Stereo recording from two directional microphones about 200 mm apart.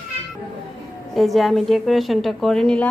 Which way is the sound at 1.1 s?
Centre (ahead or behind).